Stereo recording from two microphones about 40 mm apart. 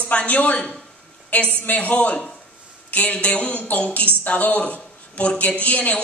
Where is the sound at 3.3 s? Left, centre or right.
Left.